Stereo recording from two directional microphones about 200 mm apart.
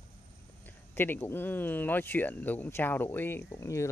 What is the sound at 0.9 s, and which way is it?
Speech, 10° left (ahead or behind).